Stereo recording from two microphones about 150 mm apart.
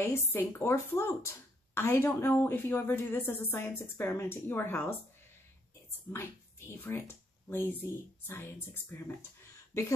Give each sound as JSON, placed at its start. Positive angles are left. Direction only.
{"t": 0.0, "sound": "a woman's voice", "side_deg": 15}
{"t": 6.1, "sound": "a woman's voice", "side_deg": 15}